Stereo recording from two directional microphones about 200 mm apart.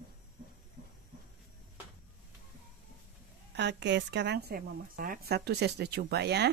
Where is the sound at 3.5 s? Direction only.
60° right (ahead or behind).